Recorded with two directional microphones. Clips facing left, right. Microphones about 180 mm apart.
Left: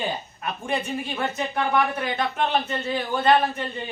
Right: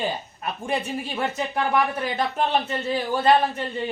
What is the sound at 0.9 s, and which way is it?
Speech, 35° right (ahead or behind).